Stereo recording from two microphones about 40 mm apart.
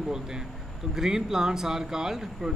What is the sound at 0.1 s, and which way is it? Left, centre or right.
Speech, centre.